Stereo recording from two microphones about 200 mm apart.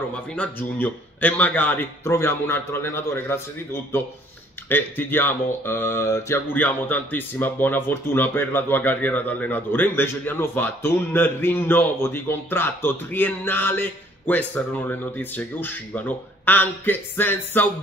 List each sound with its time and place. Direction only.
0.1 s speech: 10° left (ahead or behind)
4.6 s speech: 10° left (ahead or behind)